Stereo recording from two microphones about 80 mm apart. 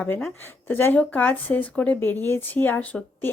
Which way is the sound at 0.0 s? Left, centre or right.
Centre.